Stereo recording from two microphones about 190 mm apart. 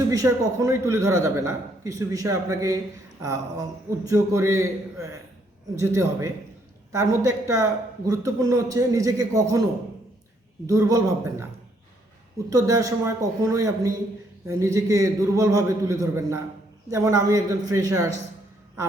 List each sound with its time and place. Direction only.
0.1 s a man's voice: 20° right (ahead or behind)
10.7 s a man's voice: 20° right (ahead or behind)
12.5 s a man's voice: 20° right (ahead or behind)